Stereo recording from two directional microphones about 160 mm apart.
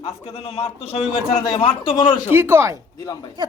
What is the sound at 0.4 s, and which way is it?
Speech, 35° left (ahead or behind).